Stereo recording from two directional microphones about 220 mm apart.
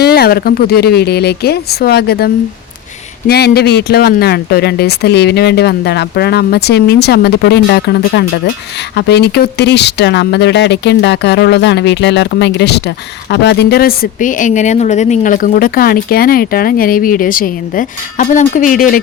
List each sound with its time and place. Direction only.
0.0 s speech: 45° left (ahead or behind)